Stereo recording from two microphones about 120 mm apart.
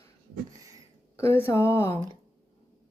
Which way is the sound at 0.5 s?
30° right (ahead or behind).